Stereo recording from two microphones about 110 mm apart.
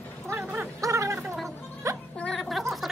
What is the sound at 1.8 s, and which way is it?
Music, 30° right (ahead or behind).